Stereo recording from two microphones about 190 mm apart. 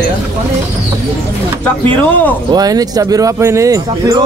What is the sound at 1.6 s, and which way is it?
Speech, 10° left (ahead or behind).